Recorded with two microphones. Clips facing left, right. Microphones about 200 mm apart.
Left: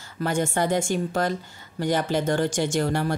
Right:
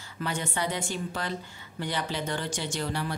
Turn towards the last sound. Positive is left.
turn(degrees=50)  # may be behind; listen again after turning